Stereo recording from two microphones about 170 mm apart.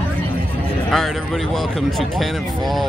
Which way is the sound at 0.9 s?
Centre (ahead or behind).